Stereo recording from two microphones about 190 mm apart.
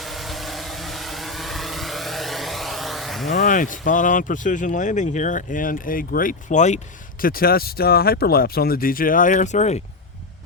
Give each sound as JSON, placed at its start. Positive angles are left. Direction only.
{"t": 0.0, "sound": "vehicle", "side_deg": 0}
{"t": 3.3, "sound": "speech", "side_deg": 45}
{"t": 7.2, "sound": "speech", "side_deg": 50}